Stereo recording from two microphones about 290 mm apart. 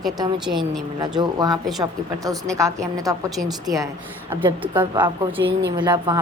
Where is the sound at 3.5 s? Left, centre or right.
Centre.